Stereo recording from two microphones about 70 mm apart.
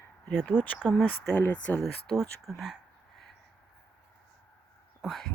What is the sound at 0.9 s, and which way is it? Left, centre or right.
Speech, centre.